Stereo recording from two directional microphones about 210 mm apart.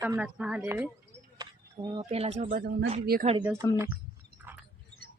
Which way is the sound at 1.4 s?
20° right (ahead or behind).